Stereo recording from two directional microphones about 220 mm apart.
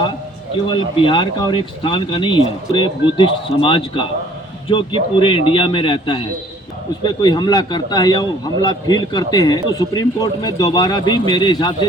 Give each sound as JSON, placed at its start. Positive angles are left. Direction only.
{"t": 0.7, "sound": "a man's voice", "side_deg": 20}